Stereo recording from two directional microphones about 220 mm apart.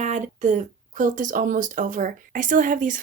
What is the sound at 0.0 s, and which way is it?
Speech, 35° right (ahead or behind).